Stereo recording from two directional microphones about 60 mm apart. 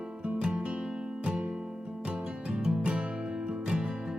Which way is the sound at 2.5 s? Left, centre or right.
Centre.